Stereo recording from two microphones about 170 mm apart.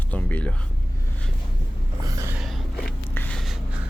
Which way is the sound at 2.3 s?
Centre (ahead or behind).